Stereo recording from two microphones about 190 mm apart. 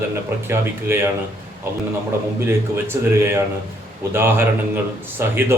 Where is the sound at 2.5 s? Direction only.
15° right (ahead or behind).